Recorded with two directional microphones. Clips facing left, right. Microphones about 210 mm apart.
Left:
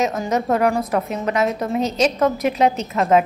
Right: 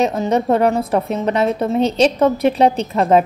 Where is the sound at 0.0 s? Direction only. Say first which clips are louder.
Right 4 dB; 30° right (ahead or behind).